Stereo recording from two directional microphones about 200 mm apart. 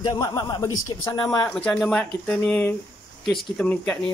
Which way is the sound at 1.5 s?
5° left (ahead or behind).